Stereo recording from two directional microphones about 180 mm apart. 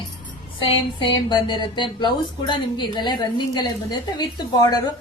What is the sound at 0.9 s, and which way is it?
A woman's voice, 25° left (ahead or behind).